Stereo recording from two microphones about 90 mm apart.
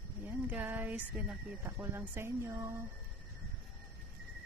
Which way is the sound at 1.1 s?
5° right (ahead or behind).